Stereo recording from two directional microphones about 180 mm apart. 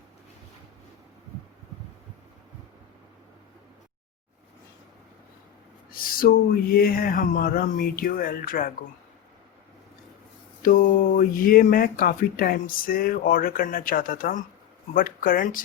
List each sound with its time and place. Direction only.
5.9 s a sound: 55° left (ahead or behind)
6.7 s speech: 55° left (ahead or behind)
10.6 s speech: 50° left (ahead or behind)